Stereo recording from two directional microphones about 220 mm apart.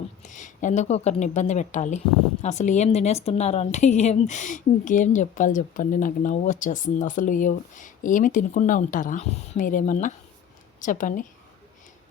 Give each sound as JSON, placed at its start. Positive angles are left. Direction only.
{"t": 0.3, "sound": "a woman's voice", "side_deg": 35}